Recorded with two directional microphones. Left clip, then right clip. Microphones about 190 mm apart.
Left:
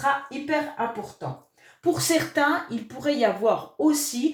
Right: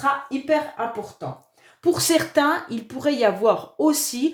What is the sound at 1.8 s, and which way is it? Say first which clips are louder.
Speech: right 3 dB; 45° right (ahead or behind).